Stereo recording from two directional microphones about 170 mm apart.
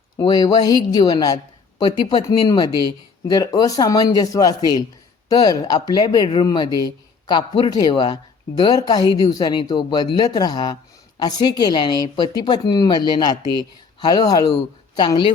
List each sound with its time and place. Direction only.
0.2 s speech: 20° left (ahead or behind)